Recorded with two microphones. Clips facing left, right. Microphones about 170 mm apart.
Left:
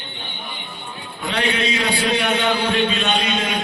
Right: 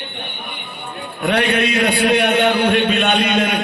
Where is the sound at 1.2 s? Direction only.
60° right (ahead or behind).